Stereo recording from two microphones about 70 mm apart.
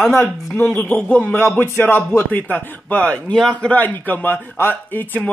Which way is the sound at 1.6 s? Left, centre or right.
Left.